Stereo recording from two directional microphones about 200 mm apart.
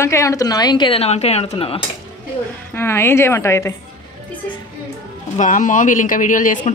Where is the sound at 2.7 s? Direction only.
10° left (ahead or behind).